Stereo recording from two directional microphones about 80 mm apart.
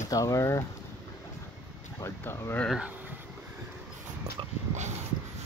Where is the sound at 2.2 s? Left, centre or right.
Left.